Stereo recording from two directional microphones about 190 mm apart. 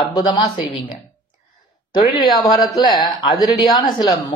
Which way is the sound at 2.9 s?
20° left (ahead or behind).